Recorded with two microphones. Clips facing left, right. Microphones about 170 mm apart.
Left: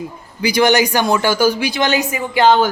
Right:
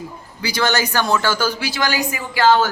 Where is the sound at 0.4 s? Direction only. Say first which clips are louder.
Left 7 dB; 15° left (ahead or behind).